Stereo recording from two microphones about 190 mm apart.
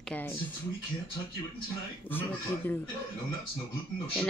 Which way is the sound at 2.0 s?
10° left (ahead or behind).